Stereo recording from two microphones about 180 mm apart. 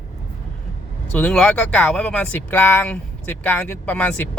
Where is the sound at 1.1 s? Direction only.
10° left (ahead or behind).